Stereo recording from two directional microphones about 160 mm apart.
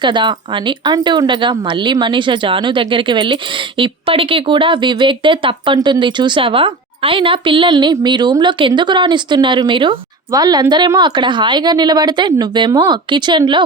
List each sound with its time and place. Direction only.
0.0 s speech: 30° right (ahead or behind)